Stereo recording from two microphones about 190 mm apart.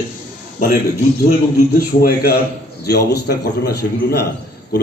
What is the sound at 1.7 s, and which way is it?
A man's voice, 55° left (ahead or behind).